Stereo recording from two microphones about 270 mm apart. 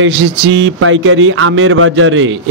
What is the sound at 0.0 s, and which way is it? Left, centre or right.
Speech, right.